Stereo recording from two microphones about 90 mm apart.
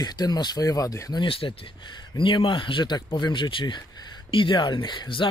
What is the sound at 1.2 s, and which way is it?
Speech, 90° left.